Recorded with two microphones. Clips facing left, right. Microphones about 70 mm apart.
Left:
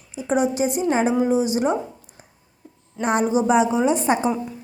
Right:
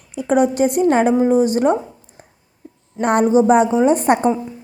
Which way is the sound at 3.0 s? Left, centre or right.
Right.